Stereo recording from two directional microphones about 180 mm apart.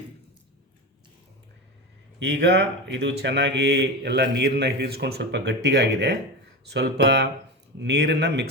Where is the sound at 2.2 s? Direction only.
70° right (ahead or behind).